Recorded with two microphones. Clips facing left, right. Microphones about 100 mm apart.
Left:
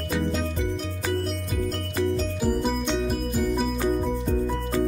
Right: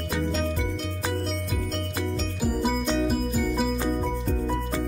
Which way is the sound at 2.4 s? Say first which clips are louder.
Right 1 dB; centre (ahead or behind).